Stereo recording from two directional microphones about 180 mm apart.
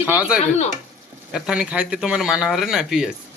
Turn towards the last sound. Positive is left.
turn(degrees=0)  # may be behind; listen again after turning